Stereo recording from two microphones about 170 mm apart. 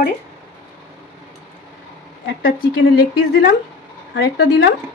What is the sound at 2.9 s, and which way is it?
Speech, 70° left (ahead or behind).